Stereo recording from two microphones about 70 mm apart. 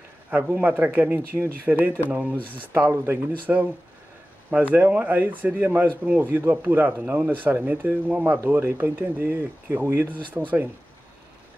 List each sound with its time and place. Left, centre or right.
0.3 s speech: right
2.0 s speech: centre
2.9 s speech: right
3.5 s speech: centre